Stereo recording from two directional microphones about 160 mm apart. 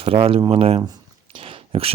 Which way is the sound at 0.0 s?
35° right (ahead or behind).